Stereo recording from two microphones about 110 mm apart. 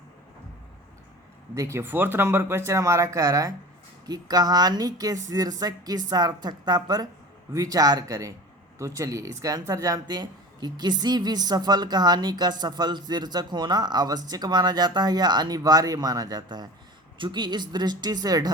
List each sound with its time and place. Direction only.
1.5 s speech: 25° right (ahead or behind)